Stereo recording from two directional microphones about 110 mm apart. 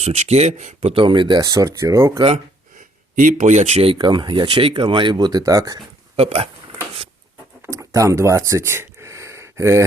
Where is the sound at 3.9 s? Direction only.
45° right (ahead or behind).